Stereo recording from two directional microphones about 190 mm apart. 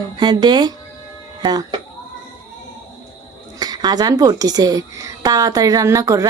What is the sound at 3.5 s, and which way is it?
Speech, 20° right (ahead or behind).